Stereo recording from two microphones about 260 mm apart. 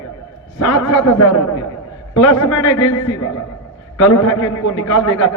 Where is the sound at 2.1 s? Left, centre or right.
Left.